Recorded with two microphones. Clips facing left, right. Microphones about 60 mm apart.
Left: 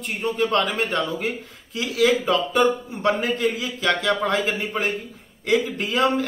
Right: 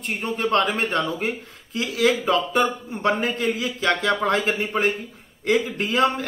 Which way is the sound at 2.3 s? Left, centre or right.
Right.